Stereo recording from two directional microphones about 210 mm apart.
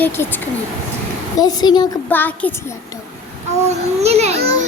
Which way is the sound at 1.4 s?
20° left (ahead or behind).